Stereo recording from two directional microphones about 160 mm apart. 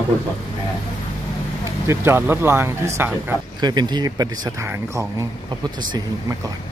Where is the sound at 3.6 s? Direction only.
25° right (ahead or behind).